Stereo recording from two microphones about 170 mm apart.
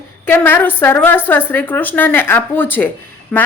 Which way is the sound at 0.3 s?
10° left (ahead or behind).